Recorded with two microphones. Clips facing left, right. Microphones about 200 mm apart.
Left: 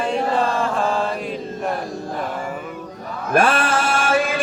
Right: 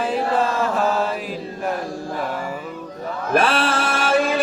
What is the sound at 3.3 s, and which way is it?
Music, 50° left (ahead or behind).